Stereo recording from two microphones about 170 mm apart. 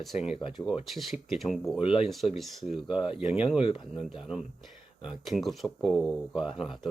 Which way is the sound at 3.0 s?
35° left (ahead or behind).